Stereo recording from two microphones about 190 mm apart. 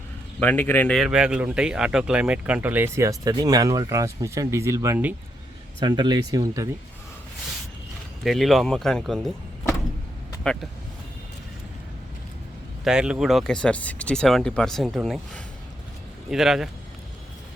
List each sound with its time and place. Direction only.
0.3 s speech: 10° left (ahead or behind); by 5.1 s 10° right (ahead or behind)
5.8 s speech: 25° right (ahead or behind)
8.2 s speech: centre (ahead or behind)
10.4 s speech: 5° left (ahead or behind)
12.8 s speech: 5° right (ahead or behind)
16.3 s speech: centre (ahead or behind)